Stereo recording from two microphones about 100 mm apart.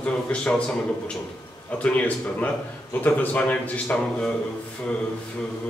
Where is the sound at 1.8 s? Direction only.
15° left (ahead or behind).